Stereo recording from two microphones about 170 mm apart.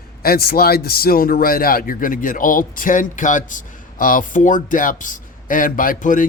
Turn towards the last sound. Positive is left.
turn(degrees=50)  # may be behind; listen again after turning